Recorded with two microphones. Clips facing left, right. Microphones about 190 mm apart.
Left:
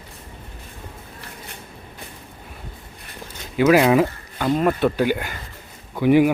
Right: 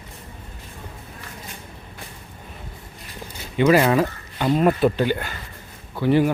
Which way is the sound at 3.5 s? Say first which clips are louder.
Left 2 dB; 5° left (ahead or behind).